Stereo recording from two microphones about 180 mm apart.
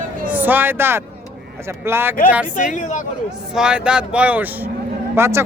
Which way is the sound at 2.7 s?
45° left (ahead or behind).